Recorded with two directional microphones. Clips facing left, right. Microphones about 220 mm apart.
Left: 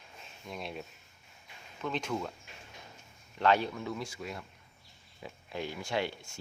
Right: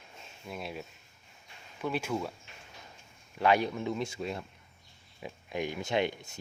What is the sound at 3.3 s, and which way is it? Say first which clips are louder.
Speech: right 1 dB; 10° right (ahead or behind).